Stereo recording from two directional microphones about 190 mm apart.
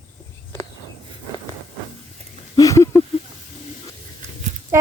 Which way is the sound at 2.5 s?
15° left (ahead or behind).